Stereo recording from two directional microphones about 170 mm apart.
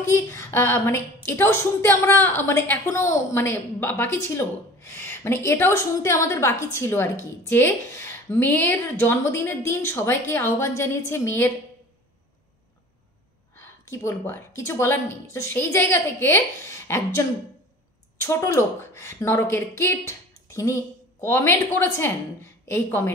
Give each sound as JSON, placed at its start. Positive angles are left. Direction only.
{"t": 0.1, "sound": "a woman's voice", "side_deg": 15}
{"t": 13.6, "sound": "a woman's voice", "side_deg": 15}